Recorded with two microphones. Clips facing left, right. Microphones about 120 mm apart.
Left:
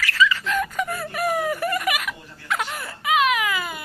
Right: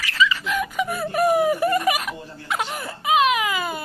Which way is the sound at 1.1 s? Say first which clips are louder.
Right 6 dB; 20° right (ahead or behind).